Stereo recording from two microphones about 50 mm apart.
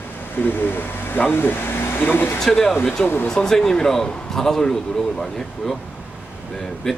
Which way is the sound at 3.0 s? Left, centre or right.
Left.